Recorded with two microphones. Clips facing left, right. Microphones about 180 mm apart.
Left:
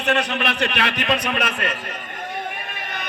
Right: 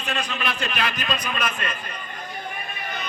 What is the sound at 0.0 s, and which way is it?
A man's voice, 80° left.